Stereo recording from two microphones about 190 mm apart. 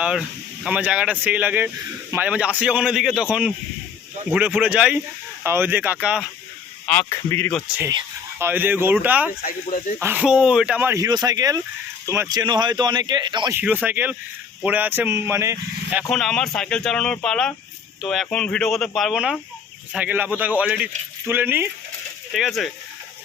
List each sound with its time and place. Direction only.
0.0 s a man's voice: 5° right (ahead or behind)
6.8 s speech: 10° left (ahead or behind)
7.8 s a man's voice: 15° right (ahead or behind)
13.6 s a man's voice: 10° right (ahead or behind)
22.3 s speech: centre (ahead or behind)